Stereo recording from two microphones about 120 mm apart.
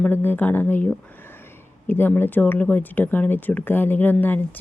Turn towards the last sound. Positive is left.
turn(degrees=15)  # may be behind; listen again after turning